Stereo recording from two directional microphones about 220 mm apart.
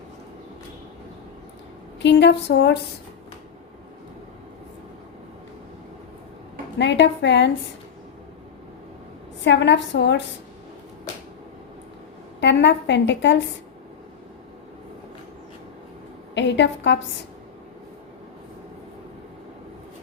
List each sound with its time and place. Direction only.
2.0 s a woman's voice: 55° left (ahead or behind)
6.7 s a woman's voice: 55° left (ahead or behind)
9.4 s a woman's voice: 55° left (ahead or behind)
12.4 s a woman's voice: 55° left (ahead or behind)
16.3 s a woman's voice: 55° left (ahead or behind)